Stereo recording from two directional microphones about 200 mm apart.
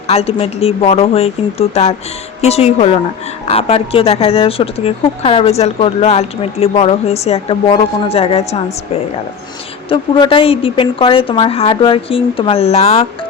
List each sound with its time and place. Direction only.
0.1 s speech: 30° left (ahead or behind)
9.9 s speech: 25° left (ahead or behind)